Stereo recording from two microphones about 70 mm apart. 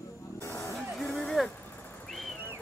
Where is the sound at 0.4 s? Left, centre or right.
Left.